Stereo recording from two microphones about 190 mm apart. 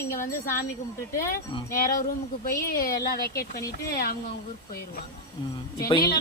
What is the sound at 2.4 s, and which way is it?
Speech, 50° left (ahead or behind).